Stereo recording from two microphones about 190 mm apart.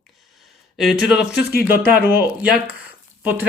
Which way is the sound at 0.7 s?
Centre (ahead or behind).